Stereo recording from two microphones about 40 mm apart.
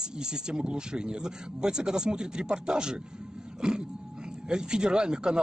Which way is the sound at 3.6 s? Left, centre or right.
Centre.